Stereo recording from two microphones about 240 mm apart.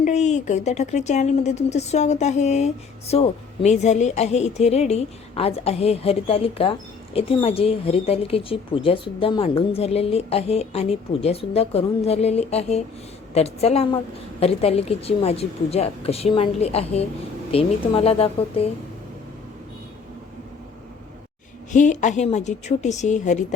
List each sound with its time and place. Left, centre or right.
0.0 s a woman's voice: left
21.7 s a woman's voice: left